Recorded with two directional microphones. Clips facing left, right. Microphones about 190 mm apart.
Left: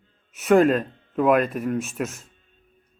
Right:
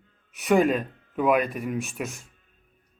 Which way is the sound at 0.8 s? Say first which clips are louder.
Left 2 dB; 30° left (ahead or behind).